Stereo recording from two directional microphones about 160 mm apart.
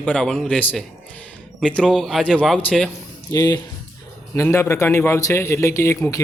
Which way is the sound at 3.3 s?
20° left (ahead or behind).